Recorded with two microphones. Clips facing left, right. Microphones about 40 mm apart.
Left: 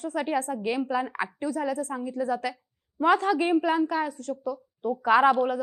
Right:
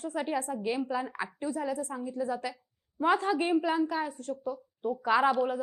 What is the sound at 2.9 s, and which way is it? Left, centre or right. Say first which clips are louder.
Speech: left 4 dB; left.